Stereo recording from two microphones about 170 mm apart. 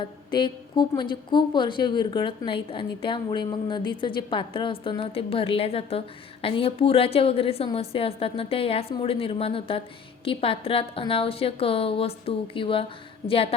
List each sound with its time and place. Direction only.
0.0 s a woman's voice: 30° left (ahead or behind)